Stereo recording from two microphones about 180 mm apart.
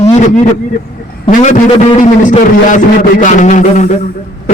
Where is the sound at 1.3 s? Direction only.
40° left (ahead or behind).